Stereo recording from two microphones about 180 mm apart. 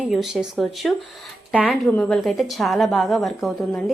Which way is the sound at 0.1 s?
Centre (ahead or behind).